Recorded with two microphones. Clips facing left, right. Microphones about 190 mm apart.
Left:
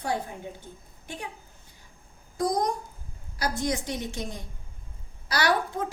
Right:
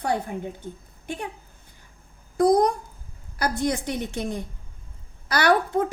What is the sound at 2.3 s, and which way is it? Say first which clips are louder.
A woman's voice: right 8 dB; 60° right (ahead or behind).